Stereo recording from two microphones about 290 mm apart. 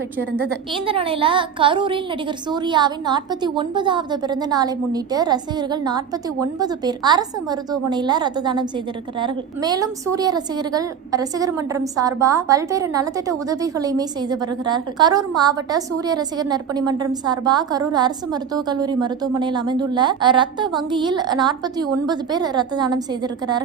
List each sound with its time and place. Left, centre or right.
0.9 s a woman's voice: centre